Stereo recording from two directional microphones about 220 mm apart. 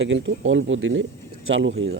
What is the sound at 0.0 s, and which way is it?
Speech, 55° right (ahead or behind).